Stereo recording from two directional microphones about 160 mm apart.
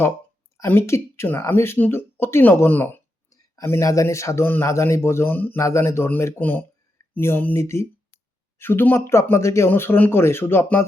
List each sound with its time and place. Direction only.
0.5 s a man's voice: 15° left (ahead or behind)